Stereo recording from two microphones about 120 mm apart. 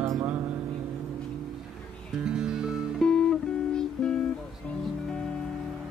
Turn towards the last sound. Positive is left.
turn(degrees=5)  # may be behind; listen again after turning